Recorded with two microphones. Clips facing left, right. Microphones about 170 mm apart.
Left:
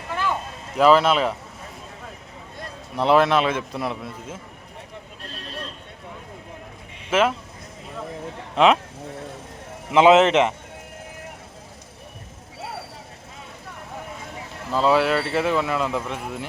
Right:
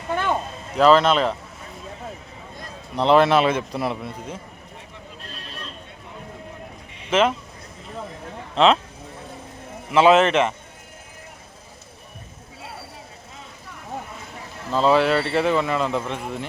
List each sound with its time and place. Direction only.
0.1 s a sound: 25° right (ahead or behind)
0.8 s speech: 10° left (ahead or behind)
2.9 s speech: 5° left (ahead or behind)
7.1 s speech: 5° left (ahead or behind)
8.5 s speech: 15° left (ahead or behind)
9.9 s speech: 15° left (ahead or behind)
14.7 s speech: 5° left (ahead or behind)